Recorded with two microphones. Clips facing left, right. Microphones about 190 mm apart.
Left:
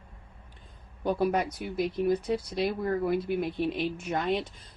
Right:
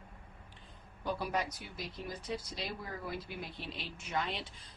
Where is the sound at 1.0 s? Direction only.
55° left (ahead or behind).